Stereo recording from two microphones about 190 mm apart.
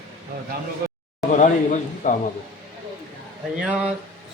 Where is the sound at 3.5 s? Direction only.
5° right (ahead or behind).